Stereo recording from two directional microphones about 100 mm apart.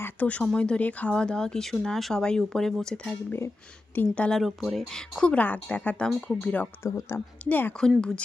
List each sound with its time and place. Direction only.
0.0 s a sound: 15° left (ahead or behind)
0.4 s speech: 10° left (ahead or behind)
6.8 s speech: 25° left (ahead or behind)
7.4 s speech: 15° left (ahead or behind)